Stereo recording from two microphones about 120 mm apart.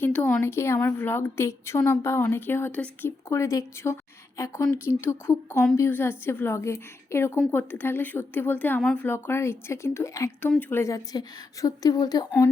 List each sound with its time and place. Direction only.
0.0 s a woman's voice: 10° left (ahead or behind); by 12.2 s 30° left (ahead or behind)